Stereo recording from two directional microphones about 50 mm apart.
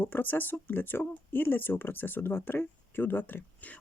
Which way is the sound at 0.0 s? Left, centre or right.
Left.